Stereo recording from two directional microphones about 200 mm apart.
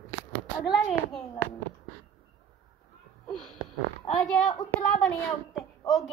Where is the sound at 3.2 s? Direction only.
5° left (ahead or behind).